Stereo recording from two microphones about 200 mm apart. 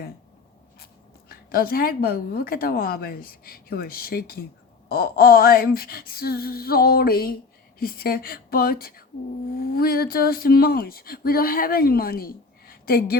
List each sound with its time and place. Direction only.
1.3 s speech: 50° left (ahead or behind)